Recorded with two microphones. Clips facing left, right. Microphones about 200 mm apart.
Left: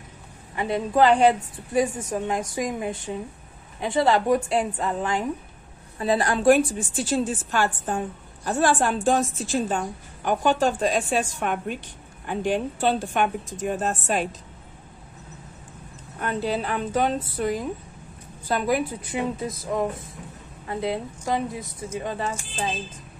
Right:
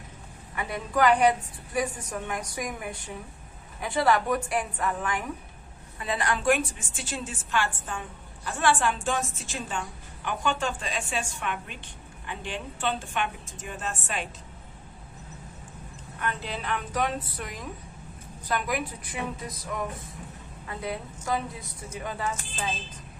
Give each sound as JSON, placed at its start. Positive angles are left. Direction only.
{"t": 0.6, "sound": "a woman's voice", "side_deg": 25}
{"t": 16.2, "sound": "a woman's voice", "side_deg": 35}